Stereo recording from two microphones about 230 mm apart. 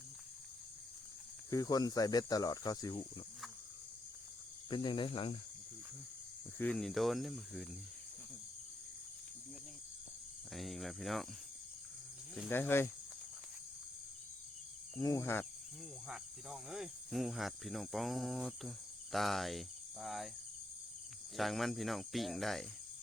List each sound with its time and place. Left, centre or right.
1.5 s speech: centre
4.7 s cricket: centre
6.6 s cricket: centre
10.5 s cricket: centre
12.3 s speech: centre
15.0 s speech: centre
16.0 s cricket: centre
21.3 s cricket: centre